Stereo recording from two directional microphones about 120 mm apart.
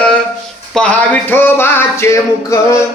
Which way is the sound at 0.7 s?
5° left (ahead or behind).